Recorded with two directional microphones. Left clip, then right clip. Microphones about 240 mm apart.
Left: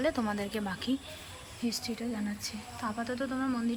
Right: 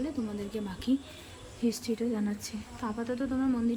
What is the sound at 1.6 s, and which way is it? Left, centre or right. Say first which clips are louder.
Speech: right 4 dB; centre.